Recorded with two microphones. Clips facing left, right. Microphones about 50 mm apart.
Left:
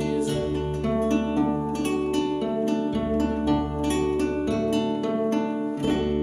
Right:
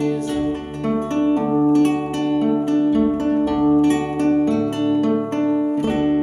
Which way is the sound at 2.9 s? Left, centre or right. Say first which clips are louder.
Right 7 dB; centre.